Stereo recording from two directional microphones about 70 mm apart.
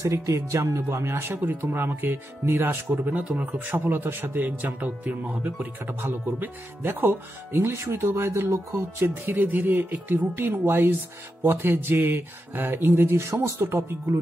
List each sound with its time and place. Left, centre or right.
0.0 s speech: right
3.6 s speech: right
13.6 s speech: right